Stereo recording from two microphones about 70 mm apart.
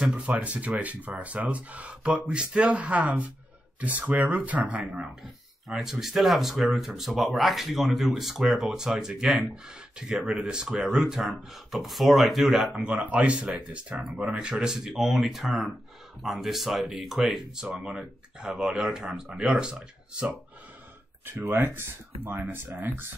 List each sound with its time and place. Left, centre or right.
0.0 s speech: centre
5.7 s speech: centre
12.7 s speech: centre
21.3 s speech: right